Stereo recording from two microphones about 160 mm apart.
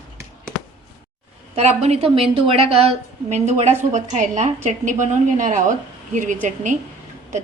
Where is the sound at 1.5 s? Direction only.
40° right (ahead or behind).